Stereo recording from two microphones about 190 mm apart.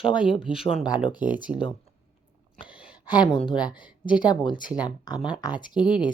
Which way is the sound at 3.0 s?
20° left (ahead or behind).